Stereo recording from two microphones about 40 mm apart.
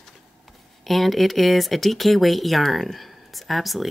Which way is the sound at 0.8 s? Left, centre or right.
Centre.